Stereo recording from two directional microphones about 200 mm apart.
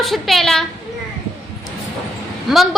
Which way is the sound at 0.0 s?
Centre (ahead or behind).